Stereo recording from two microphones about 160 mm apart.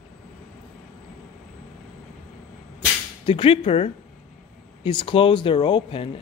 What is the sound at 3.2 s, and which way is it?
Speech, 35° left (ahead or behind).